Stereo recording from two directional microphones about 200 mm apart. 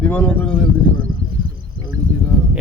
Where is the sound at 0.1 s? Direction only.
5° left (ahead or behind).